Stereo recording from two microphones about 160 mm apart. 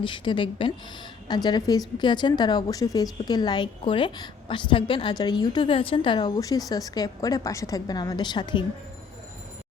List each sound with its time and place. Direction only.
0.0 s a woman's voice: 30° left (ahead or behind)